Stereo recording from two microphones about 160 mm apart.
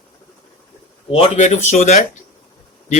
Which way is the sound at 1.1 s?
40° left (ahead or behind).